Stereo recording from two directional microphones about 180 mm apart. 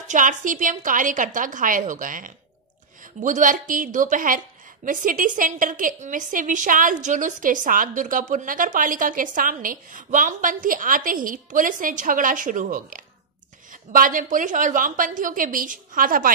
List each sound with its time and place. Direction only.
0.0 s a woman's voice: 45° right (ahead or behind)